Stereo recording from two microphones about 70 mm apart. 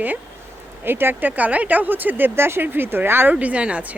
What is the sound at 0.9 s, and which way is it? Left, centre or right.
Speech, right.